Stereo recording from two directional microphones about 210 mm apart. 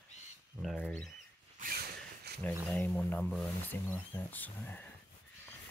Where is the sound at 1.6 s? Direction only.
45° right (ahead or behind).